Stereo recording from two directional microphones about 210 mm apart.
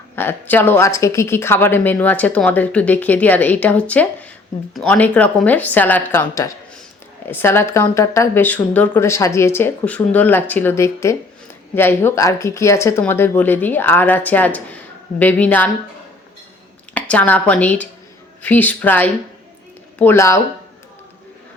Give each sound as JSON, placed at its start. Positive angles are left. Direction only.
{"t": 0.2, "sound": "speech", "side_deg": 10}
{"t": 16.9, "sound": "speech", "side_deg": 5}